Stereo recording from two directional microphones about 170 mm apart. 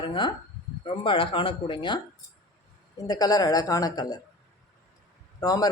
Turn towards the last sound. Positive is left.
turn(degrees=20)  # may be behind; listen again after turning